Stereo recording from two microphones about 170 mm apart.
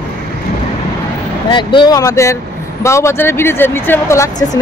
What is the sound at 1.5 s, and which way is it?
Speech, 30° left (ahead or behind).